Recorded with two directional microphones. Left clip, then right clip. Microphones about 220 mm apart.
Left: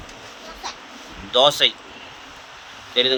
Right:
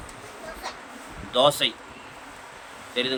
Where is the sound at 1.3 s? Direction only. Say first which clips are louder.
Left 5 dB; 20° left (ahead or behind).